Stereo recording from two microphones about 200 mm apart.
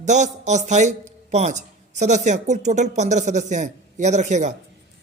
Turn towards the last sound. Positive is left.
turn(degrees=-35)  # may be behind; listen again after turning